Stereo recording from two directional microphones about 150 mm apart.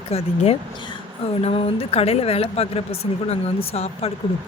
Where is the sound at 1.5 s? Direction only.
40° left (ahead or behind).